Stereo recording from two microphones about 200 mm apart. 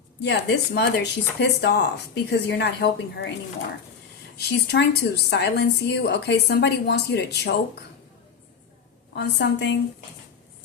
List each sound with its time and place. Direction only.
0.2 s a woman's voice: 60° left (ahead or behind)
4.4 s a woman's voice: 55° left (ahead or behind)
9.1 s a woman's voice: 55° left (ahead or behind)